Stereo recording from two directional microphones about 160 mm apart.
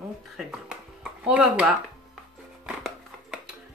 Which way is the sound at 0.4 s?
5° right (ahead or behind).